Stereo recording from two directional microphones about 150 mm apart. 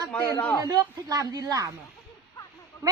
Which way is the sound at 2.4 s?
30° left (ahead or behind).